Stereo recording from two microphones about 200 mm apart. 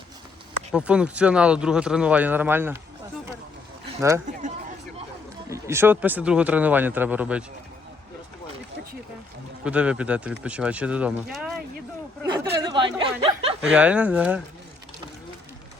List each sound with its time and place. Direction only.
0.7 s speech: 5° right (ahead or behind)
5.5 s speech: 15° right (ahead or behind)
9.6 s speech: 5° right (ahead or behind)
12.2 s a sound: 15° right (ahead or behind)
13.6 s speech: 5° right (ahead or behind)